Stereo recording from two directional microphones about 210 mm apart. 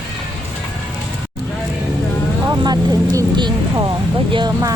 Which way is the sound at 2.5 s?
15° right (ahead or behind).